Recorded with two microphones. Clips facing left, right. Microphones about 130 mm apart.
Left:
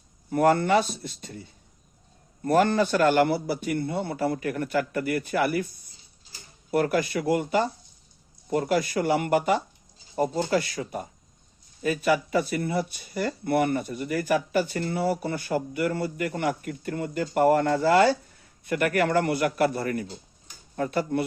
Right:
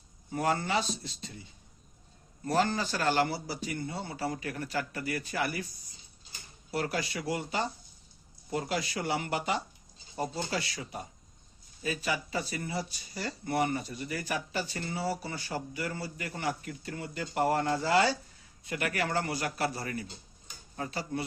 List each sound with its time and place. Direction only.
0.3 s speech: 60° left (ahead or behind)
2.4 s speech: 55° left (ahead or behind)